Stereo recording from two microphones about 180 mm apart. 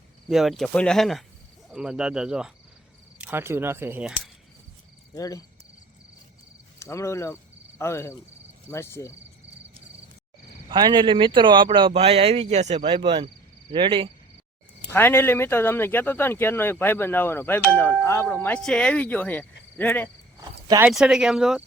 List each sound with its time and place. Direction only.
0.3 s speech: centre (ahead or behind)
5.1 s speech: 20° left (ahead or behind)
6.7 s speech: 15° left (ahead or behind)
10.7 s speech: 25° right (ahead or behind)
14.8 s speech: 10° left (ahead or behind)
20.4 s a sound: 25° right (ahead or behind)
20.8 s speech: 5° right (ahead or behind)